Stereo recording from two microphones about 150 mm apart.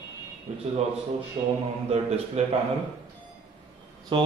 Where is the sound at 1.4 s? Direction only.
45° right (ahead or behind).